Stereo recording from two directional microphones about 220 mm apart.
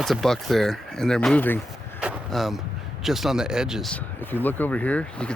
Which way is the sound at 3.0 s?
Centre (ahead or behind).